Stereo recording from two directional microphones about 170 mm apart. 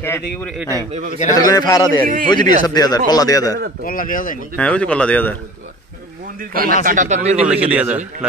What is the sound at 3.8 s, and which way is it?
Speech, 55° left (ahead or behind).